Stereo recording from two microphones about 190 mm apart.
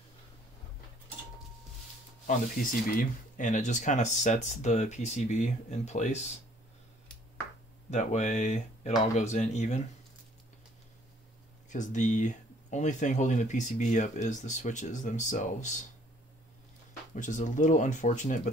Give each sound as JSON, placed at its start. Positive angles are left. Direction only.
{"t": 2.2, "sound": "speech", "side_deg": 45}
{"t": 7.9, "sound": "speech", "side_deg": 40}
{"t": 11.7, "sound": "speech", "side_deg": 40}
{"t": 17.1, "sound": "speech", "side_deg": 40}